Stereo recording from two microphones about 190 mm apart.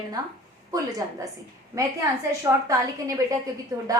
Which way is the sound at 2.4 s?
20° right (ahead or behind).